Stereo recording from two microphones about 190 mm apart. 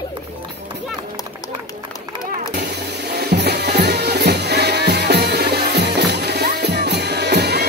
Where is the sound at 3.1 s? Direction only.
60° right (ahead or behind).